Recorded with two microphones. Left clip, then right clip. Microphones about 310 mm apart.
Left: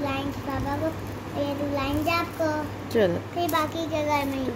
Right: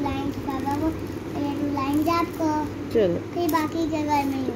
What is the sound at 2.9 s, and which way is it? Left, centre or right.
Speech, left.